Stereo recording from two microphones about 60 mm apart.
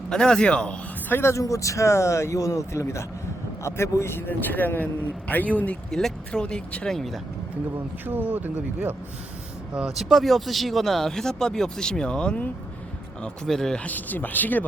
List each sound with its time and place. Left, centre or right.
0.1 s speech: centre
1.1 s speech: left
1.4 s speech: left
4.4 s speech: left
5.9 s speech: centre
8.0 s speech: right
9.7 s speech: centre
13.7 s speech: left